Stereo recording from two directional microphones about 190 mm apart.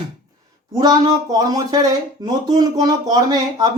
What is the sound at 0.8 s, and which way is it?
Speech, 20° right (ahead or behind).